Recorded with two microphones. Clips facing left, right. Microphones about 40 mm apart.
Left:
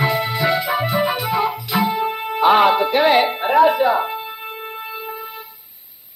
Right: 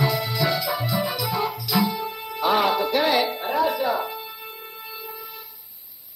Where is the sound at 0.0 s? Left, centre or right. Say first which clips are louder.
Left 5 dB; left.